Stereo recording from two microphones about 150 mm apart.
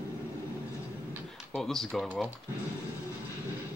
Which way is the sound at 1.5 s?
5° left (ahead or behind).